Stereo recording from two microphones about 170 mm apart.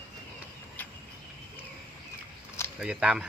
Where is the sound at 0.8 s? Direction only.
10° left (ahead or behind).